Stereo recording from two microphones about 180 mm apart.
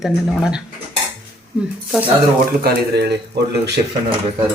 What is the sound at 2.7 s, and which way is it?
Speech, 65° right (ahead or behind).